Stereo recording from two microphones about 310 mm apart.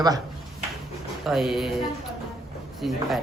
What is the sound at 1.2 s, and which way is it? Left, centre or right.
Speech, centre.